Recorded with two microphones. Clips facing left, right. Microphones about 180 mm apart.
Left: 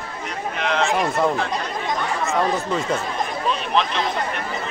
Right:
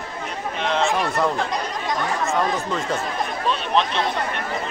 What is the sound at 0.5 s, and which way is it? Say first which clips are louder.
Speech: even; centre (ahead or behind).